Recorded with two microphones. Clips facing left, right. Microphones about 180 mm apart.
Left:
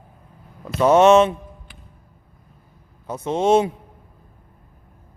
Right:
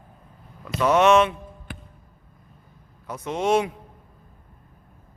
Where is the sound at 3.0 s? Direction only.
25° left (ahead or behind).